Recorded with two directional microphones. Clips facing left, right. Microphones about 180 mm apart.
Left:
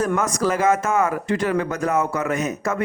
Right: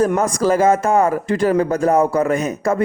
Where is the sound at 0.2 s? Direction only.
35° right (ahead or behind).